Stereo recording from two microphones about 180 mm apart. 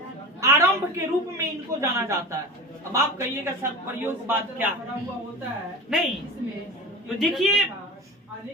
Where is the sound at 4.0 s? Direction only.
10° right (ahead or behind).